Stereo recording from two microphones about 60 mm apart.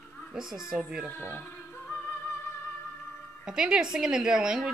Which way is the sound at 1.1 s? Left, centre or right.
Left.